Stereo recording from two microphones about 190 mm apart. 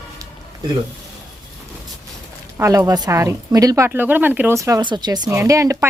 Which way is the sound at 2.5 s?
15° right (ahead or behind).